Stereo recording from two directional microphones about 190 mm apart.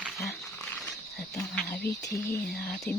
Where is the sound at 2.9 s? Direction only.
10° left (ahead or behind).